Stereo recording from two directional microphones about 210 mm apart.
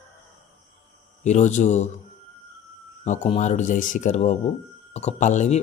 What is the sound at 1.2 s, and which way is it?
Speech, 35° left (ahead or behind).